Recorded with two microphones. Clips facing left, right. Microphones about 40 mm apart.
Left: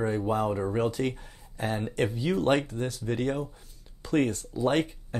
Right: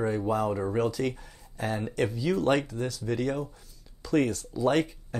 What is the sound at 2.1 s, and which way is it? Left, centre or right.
Speech, left.